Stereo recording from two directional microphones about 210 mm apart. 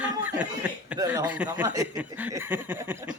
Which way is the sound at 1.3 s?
5° right (ahead or behind).